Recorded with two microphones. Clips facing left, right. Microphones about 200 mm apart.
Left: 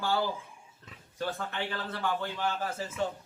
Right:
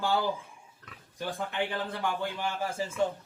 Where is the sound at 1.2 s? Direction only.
15° right (ahead or behind).